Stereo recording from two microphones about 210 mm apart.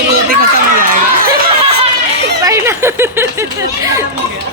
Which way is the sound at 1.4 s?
30° right (ahead or behind).